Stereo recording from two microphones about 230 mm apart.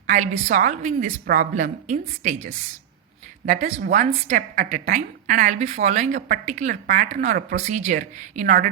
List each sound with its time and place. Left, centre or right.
0.1 s a woman's voice: right